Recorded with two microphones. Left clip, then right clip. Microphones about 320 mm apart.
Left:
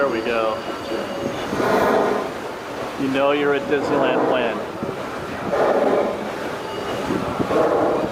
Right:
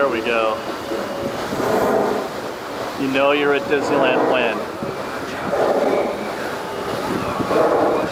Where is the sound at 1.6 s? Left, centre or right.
Centre.